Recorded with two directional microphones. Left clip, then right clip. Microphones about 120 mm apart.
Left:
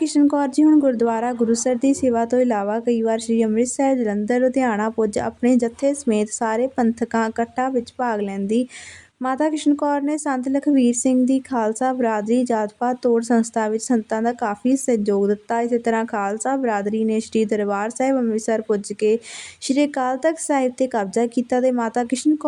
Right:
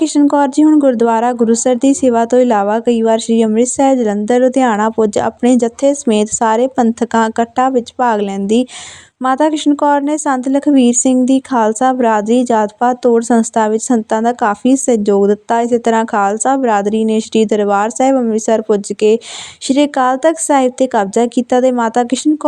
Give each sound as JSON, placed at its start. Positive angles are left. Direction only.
{"t": 0.2, "sound": "speech", "side_deg": -30}